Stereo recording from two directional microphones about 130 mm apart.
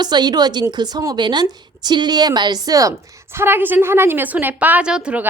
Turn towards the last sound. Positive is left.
turn(degrees=-10)  # may be behind; listen again after turning